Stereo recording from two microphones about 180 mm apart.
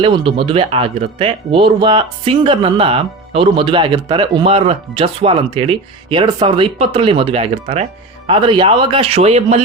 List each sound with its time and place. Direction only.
0.0 s a man's voice: 30° right (ahead or behind)